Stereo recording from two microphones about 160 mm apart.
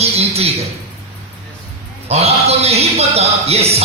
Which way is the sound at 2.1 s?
40° right (ahead or behind).